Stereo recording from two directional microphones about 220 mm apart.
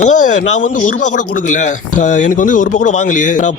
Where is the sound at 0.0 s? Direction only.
35° left (ahead or behind).